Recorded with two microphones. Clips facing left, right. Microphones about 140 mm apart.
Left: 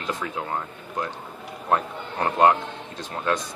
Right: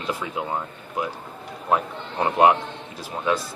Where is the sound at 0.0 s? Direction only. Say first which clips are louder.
Right 2 dB; 10° right (ahead or behind).